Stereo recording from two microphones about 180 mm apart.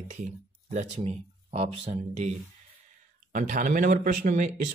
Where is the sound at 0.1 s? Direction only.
40° right (ahead or behind).